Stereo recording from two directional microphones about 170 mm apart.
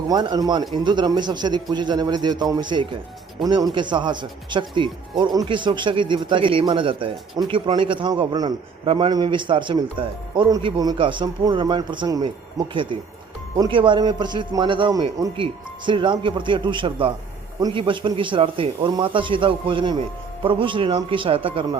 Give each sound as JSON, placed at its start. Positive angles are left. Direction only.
{"t": 0.1, "sound": "a man's voice", "side_deg": -25}